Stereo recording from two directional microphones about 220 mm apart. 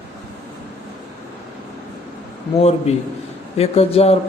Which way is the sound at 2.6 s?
30° left (ahead or behind).